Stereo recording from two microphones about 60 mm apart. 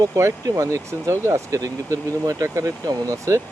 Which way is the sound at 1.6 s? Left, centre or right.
Right.